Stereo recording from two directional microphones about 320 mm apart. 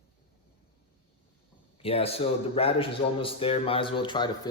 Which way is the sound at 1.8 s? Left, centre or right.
Centre.